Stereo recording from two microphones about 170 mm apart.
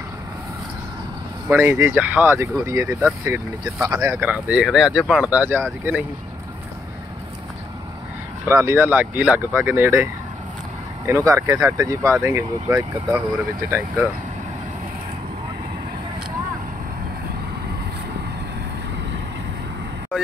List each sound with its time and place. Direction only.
1.5 s speech: 15° right (ahead or behind)
8.5 s speech: 15° right (ahead or behind)
11.1 s speech: 15° right (ahead or behind)